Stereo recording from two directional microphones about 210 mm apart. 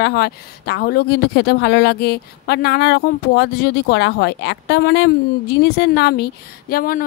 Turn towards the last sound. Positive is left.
turn(degrees=45)  # may be behind; listen again after turning